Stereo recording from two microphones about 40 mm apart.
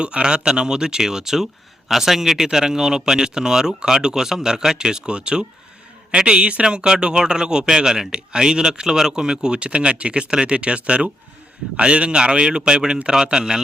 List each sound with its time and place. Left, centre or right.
0.0 s speech: right